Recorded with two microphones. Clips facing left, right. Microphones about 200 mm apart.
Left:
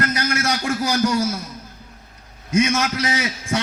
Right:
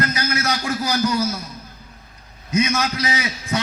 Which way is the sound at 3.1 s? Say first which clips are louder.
Left 2 dB; 50° left (ahead or behind).